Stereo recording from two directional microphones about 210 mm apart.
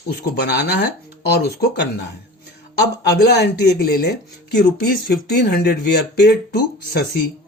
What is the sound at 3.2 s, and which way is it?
Speech, 50° left (ahead or behind).